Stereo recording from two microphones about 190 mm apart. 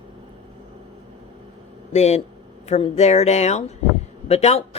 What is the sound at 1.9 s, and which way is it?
A woman's voice, 35° left (ahead or behind).